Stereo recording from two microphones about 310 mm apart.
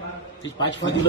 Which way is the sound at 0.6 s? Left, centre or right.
Left.